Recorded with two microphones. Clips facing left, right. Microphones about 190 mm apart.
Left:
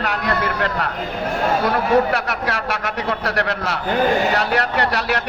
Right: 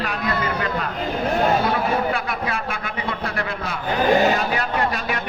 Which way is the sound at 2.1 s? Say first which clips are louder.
Left 2 dB; 80° left.